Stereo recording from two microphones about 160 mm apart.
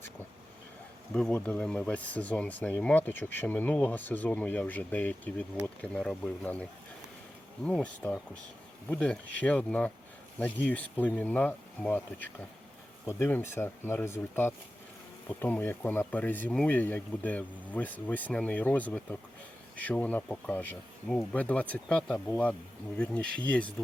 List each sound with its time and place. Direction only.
1.1 s speech: 5° left (ahead or behind)